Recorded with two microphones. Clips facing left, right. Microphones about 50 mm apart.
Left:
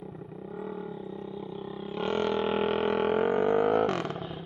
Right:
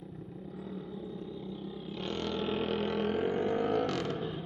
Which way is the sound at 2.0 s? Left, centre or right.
Left.